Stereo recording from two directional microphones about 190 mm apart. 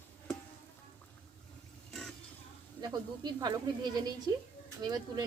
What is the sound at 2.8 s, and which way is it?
Speech, 20° right (ahead or behind).